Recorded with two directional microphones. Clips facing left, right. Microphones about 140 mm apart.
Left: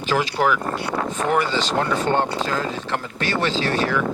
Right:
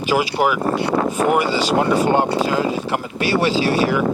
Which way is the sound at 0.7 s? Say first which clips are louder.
Right 6 dB; 25° right (ahead or behind).